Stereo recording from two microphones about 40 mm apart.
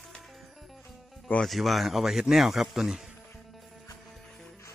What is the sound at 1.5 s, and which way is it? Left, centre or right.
Speech, centre.